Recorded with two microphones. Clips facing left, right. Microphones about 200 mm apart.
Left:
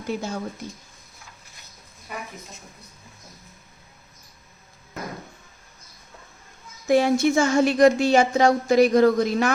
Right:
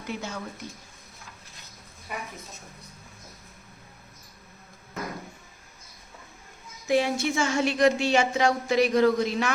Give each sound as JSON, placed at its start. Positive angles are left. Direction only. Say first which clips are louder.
{"t": 0.1, "sound": "speech", "louder": "left 6 dB", "side_deg": 35}
{"t": 6.8, "sound": "speech", "louder": "left 6 dB", "side_deg": 45}